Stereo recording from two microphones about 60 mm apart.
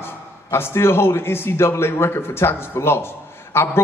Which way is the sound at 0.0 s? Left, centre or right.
Left.